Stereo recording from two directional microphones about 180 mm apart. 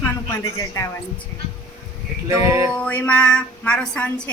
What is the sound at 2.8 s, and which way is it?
A woman's voice, 10° left (ahead or behind).